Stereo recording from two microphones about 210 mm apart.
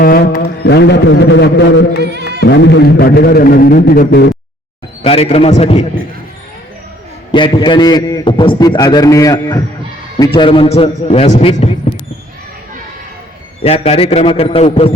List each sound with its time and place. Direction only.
0.0 s music: 45° left (ahead or behind)
5.0 s a man's voice: 30° left (ahead or behind)
7.3 s a man's voice: 20° left (ahead or behind)
13.6 s a man's voice: 30° left (ahead or behind)